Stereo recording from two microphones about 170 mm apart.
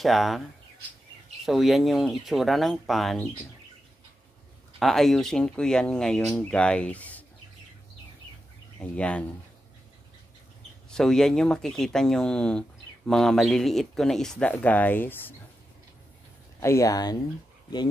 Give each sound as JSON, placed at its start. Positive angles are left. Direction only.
{"t": 0.0, "sound": "speech", "side_deg": 0}
{"t": 1.4, "sound": "speech", "side_deg": 0}
{"t": 4.7, "sound": "speech", "side_deg": 0}
{"t": 8.9, "sound": "speech", "side_deg": 5}
{"t": 10.9, "sound": "speech", "side_deg": 5}
{"t": 16.5, "sound": "speech", "side_deg": 20}